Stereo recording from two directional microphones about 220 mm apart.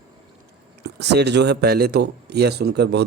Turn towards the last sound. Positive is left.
turn(degrees=-50)  # may be behind; listen again after turning